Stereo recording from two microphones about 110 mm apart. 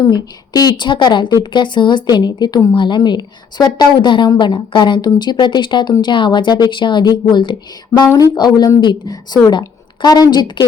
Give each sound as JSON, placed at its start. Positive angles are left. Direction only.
{"t": 0.0, "sound": "a woman's voice", "side_deg": 35}
{"t": 8.0, "sound": "speech", "side_deg": 25}
{"t": 8.4, "sound": "a woman's voice", "side_deg": 35}